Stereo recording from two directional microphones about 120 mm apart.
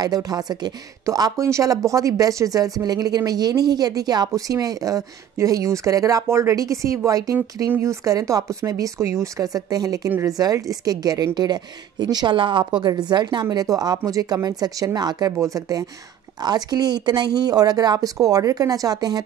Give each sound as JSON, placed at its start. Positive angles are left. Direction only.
{"t": 0.0, "sound": "speech", "side_deg": -30}